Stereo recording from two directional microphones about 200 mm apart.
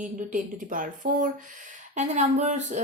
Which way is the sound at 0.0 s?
40° right (ahead or behind).